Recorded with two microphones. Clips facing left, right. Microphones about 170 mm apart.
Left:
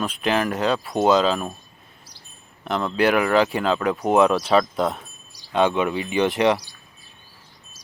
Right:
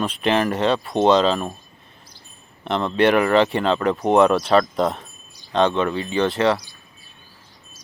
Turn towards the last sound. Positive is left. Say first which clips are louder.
# even
turn(degrees=15)  # may be behind; listen again after turning